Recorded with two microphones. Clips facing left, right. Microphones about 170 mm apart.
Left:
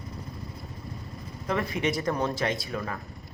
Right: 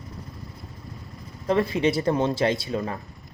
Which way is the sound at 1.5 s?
30° right (ahead or behind).